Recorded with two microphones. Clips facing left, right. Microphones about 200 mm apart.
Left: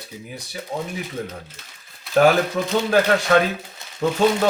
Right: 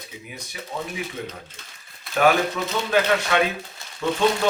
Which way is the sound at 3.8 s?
20° left (ahead or behind).